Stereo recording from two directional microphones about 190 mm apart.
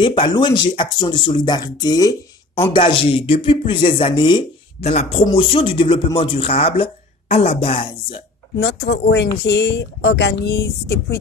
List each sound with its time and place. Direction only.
0.0 s speech: 25° left (ahead or behind)
8.5 s speech: 60° left (ahead or behind)